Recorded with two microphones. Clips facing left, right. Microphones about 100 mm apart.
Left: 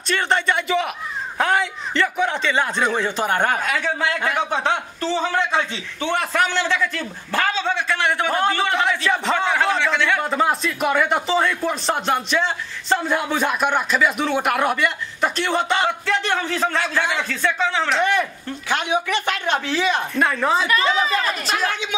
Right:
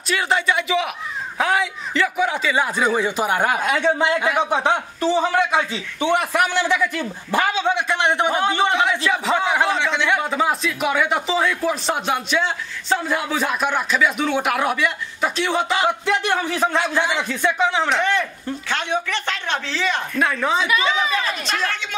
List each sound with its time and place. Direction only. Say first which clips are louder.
0.1 s a man's voice: even; centre (ahead or behind)
3.6 s a man's voice: right 4 dB; 20° right (ahead or behind)
8.3 s a man's voice: right 1 dB; 5° right (ahead or behind)
10.3 s speech: left 1 dB; centre (ahead or behind)
16.1 s a man's voice: right 1 dB; 15° right (ahead or behind)
18.7 s speech: left 3 dB; 15° left (ahead or behind)
20.2 s speech: even; centre (ahead or behind)